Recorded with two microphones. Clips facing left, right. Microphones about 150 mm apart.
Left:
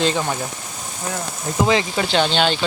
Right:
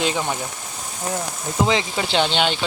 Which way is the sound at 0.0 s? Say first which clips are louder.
Left 2 dB; 5° right (ahead or behind).